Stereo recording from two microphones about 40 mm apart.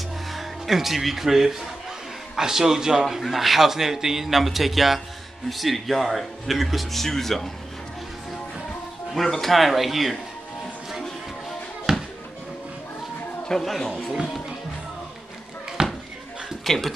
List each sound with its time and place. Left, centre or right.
0.3 s a man's voice: centre
9.1 s speech: centre
11.9 s music: centre
13.5 s speech: centre
15.8 s a sound: centre
16.6 s speech: centre